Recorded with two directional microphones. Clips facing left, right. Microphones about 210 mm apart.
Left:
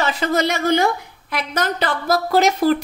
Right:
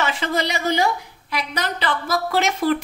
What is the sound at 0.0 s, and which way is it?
A woman's voice, 40° left (ahead or behind).